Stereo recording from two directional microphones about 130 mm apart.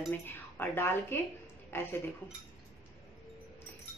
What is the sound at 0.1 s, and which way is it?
A woman's voice, 15° left (ahead or behind).